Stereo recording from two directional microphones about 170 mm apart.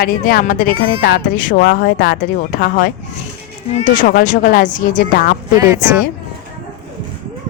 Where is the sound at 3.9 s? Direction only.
55° left (ahead or behind).